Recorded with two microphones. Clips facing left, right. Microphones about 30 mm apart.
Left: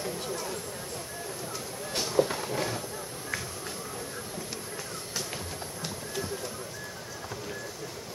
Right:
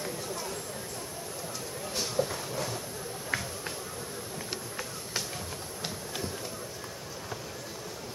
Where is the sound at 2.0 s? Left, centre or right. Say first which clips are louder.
Left 4 dB; left.